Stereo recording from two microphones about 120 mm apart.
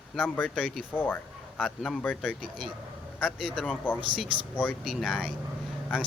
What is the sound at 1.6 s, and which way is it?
Speech, centre (ahead or behind).